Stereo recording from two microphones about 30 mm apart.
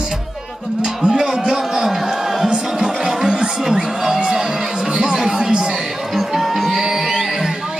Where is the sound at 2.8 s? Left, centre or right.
Centre.